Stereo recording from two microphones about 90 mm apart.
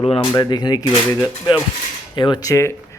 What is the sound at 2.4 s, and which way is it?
Speech, 35° left (ahead or behind).